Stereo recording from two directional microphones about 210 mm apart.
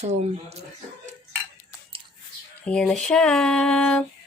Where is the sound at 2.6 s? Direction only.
5° left (ahead or behind).